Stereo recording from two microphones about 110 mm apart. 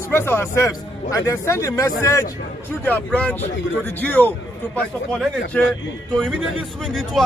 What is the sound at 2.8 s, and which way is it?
Speech, 15° left (ahead or behind).